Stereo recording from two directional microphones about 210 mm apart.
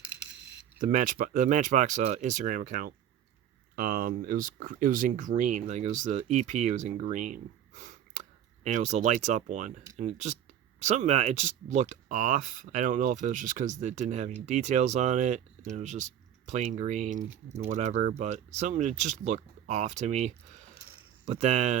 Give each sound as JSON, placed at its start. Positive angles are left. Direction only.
{"t": 0.8, "sound": "speech", "side_deg": -40}